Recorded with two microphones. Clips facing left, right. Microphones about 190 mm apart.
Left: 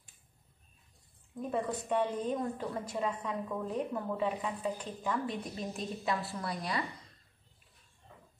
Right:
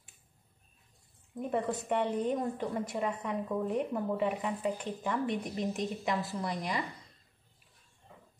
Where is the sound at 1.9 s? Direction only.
15° right (ahead or behind).